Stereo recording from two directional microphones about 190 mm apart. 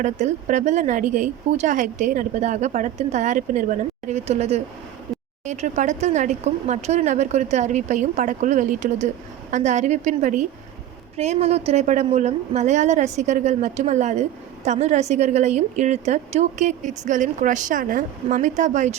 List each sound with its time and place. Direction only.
0.0 s a woman's voice: 40° right (ahead or behind)